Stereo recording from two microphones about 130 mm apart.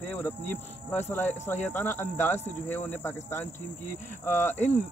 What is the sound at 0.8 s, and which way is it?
Speech, 15° left (ahead or behind).